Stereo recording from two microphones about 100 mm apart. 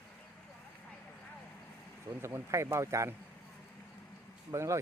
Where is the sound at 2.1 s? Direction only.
25° right (ahead or behind).